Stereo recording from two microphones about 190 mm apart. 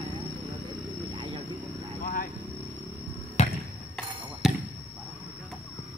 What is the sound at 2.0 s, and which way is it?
Vehicle, 45° left (ahead or behind).